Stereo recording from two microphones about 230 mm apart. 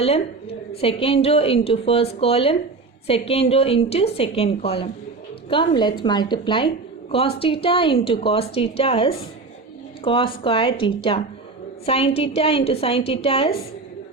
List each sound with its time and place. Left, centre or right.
0.0 s a woman's voice: left